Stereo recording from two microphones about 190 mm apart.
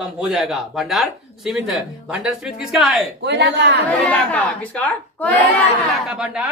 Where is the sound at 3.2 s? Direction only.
65° right (ahead or behind).